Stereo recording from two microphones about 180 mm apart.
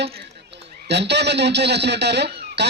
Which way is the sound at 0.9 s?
70° right (ahead or behind).